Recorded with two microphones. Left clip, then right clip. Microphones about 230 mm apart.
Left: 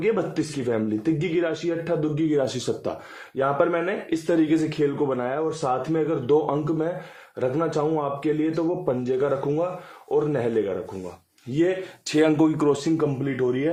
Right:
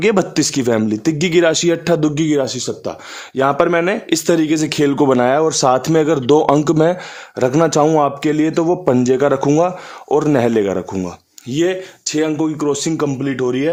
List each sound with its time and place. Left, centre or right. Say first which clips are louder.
0.0 s speech: right 9 dB; right
2.4 s speech: right 5 dB; right
3.3 s speech: right 8 dB; right
4.8 s speech: right 10 dB; right
12.0 s speech: right 2 dB; centre
13.0 s speech: right 6 dB; right